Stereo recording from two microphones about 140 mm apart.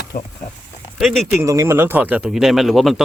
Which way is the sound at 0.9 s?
Centre (ahead or behind).